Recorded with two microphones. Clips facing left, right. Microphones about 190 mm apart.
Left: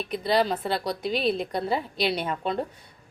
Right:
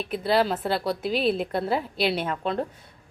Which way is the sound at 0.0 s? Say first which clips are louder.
Right 1 dB; 5° right (ahead or behind).